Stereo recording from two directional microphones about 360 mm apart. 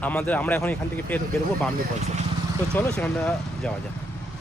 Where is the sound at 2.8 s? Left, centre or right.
Centre.